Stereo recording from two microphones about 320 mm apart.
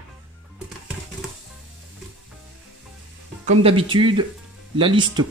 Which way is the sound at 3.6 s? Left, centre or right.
Centre.